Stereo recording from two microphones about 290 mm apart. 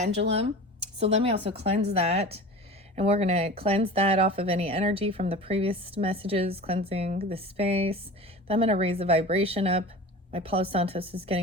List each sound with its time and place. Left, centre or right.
0.0 s speech: right